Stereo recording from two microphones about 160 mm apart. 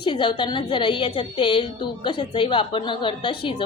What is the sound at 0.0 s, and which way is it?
A woman's voice, 30° left (ahead or behind).